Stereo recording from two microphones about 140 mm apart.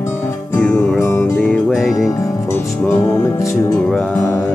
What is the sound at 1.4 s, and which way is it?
Music, centre (ahead or behind).